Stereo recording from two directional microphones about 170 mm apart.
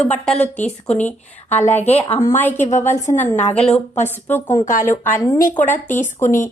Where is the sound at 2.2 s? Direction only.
15° left (ahead or behind).